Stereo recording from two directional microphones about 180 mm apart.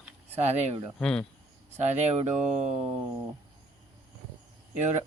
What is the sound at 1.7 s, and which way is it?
Speech, 40° right (ahead or behind).